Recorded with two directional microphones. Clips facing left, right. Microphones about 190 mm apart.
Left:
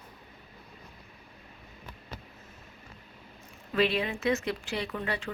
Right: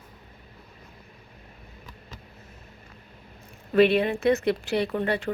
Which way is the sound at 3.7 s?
55° right (ahead or behind).